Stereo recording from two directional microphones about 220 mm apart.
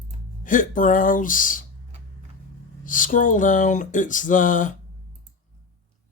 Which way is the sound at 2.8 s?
35° left (ahead or behind).